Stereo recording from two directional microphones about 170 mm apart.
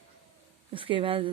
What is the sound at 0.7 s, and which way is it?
Speech, 30° right (ahead or behind).